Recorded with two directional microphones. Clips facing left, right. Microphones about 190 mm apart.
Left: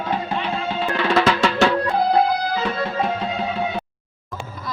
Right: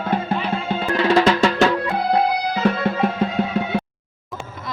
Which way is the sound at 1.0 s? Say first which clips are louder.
Right 3 dB; 30° right (ahead or behind).